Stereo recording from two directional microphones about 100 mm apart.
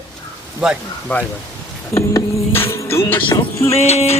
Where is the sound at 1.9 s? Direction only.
25° left (ahead or behind).